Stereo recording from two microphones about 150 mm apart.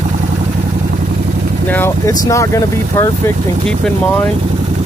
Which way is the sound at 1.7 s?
15° left (ahead or behind).